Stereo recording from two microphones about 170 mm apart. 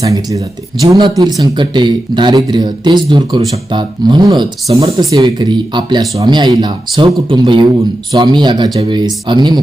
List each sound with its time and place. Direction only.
0.0 s speech: 20° right (ahead or behind)